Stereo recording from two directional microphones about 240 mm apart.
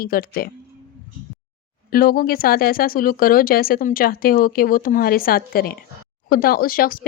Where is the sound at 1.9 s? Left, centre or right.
Left.